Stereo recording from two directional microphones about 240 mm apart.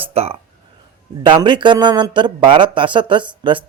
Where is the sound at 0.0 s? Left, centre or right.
Right.